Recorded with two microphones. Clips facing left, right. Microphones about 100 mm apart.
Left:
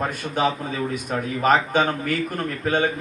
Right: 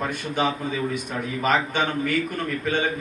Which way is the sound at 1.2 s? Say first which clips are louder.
Left 4 dB; 40° left (ahead or behind).